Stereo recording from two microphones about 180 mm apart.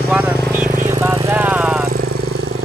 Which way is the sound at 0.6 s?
45° right (ahead or behind).